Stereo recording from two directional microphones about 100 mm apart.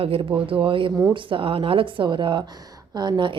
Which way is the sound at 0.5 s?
60° right (ahead or behind).